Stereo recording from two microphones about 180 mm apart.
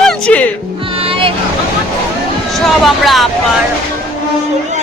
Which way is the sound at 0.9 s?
30° right (ahead or behind).